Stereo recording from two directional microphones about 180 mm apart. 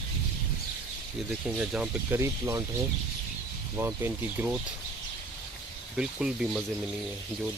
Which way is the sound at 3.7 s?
15° right (ahead or behind).